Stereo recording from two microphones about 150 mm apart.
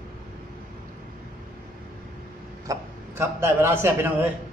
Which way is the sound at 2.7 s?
15° right (ahead or behind).